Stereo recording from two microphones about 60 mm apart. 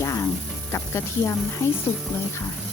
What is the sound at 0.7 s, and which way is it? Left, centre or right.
Speech, left.